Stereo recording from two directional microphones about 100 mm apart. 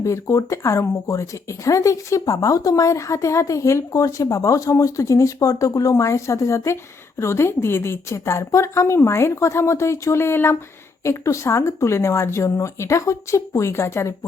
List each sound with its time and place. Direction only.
0.0 s a woman's voice: 30° left (ahead or behind)